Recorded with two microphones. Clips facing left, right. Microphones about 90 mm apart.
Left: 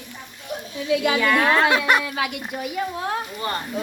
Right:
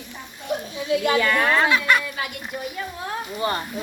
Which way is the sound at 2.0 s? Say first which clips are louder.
Left 4 dB; 90° left.